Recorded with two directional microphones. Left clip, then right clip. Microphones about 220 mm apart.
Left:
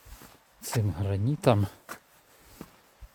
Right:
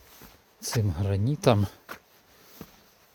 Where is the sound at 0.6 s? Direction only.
10° right (ahead or behind).